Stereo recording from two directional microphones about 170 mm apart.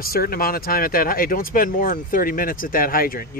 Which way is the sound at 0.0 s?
60° left (ahead or behind).